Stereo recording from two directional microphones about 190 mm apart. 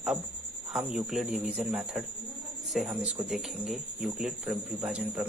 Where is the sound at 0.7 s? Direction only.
5° right (ahead or behind).